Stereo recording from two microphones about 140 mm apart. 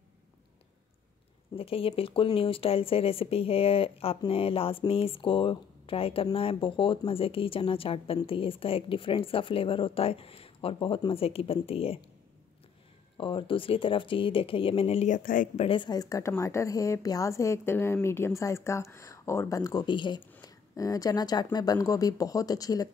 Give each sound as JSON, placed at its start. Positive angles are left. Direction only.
{"t": 1.5, "sound": "a woman's voice", "side_deg": 40}
{"t": 13.2, "sound": "a woman's voice", "side_deg": 40}
{"t": 15.0, "sound": "speech", "side_deg": 70}
{"t": 15.6, "sound": "a woman's voice", "side_deg": 35}